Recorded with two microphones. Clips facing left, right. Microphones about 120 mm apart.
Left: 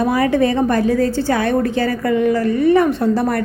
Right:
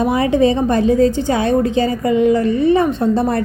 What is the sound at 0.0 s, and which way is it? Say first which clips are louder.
A woman's voice: right 1 dB; 20° right (ahead or behind).